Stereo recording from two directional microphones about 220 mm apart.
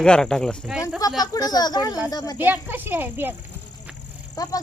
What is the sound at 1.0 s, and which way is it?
Speech, 15° left (ahead or behind).